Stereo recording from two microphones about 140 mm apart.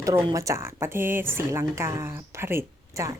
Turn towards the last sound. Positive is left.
turn(degrees=-20)  # may be behind; listen again after turning